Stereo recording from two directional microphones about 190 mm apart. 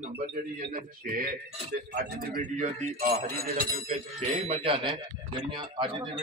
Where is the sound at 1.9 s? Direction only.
50° right (ahead or behind).